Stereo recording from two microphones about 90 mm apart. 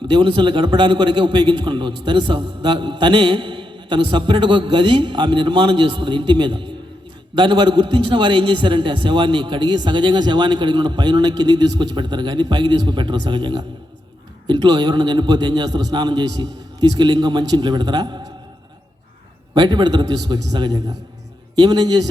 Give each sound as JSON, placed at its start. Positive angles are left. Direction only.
{"t": 0.1, "sound": "a man's voice", "side_deg": -65}
{"t": 19.5, "sound": "a man's voice", "side_deg": -55}